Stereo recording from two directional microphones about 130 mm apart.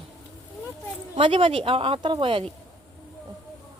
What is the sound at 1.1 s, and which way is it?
Speech, 45° right (ahead or behind).